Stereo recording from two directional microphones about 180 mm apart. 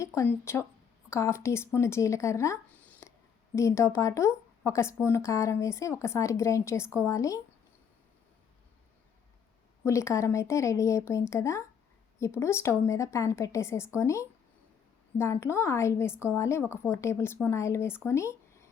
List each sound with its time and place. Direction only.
0.0 s a woman's voice: 15° left (ahead or behind)
9.8 s a woman's voice: 15° left (ahead or behind)